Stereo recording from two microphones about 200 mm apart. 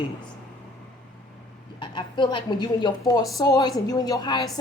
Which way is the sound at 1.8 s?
25° left (ahead or behind).